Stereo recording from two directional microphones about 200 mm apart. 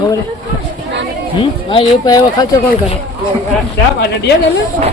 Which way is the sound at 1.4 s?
20° left (ahead or behind).